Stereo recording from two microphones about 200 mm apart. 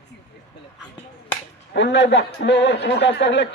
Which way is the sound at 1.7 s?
60° left (ahead or behind).